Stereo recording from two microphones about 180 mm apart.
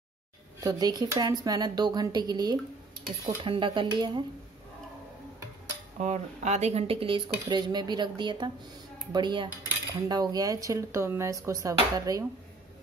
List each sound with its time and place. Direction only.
0.6 s speech: 20° right (ahead or behind)
5.9 s speech: 40° right (ahead or behind); by 12.3 s 20° right (ahead or behind)